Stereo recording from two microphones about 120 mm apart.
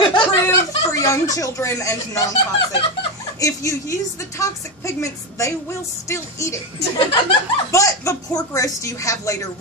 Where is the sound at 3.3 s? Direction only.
25° left (ahead or behind).